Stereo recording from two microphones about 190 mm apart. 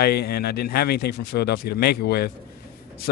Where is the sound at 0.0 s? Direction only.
55° left (ahead or behind).